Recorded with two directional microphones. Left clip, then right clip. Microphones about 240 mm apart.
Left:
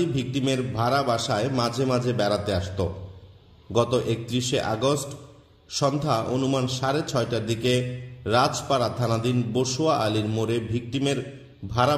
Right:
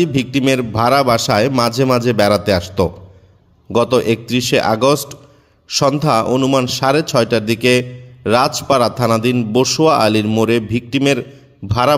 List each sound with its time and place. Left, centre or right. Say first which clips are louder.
0.0 s a man's voice: right 10 dB; right